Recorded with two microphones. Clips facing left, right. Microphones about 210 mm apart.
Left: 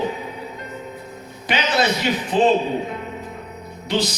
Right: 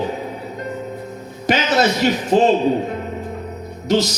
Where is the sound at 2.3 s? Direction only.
45° right (ahead or behind).